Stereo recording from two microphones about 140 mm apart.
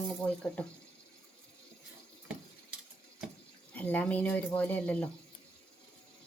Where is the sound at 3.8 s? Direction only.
10° left (ahead or behind).